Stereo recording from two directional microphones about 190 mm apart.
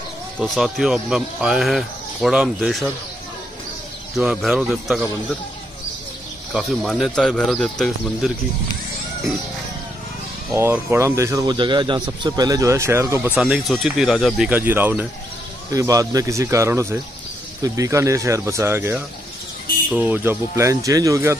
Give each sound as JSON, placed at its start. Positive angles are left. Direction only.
{"t": 0.4, "sound": "speech", "side_deg": 0}
{"t": 4.1, "sound": "speech", "side_deg": 0}
{"t": 6.5, "sound": "speech", "side_deg": 0}
{"t": 10.5, "sound": "speech", "side_deg": -10}
{"t": 13.4, "sound": "speech", "side_deg": 0}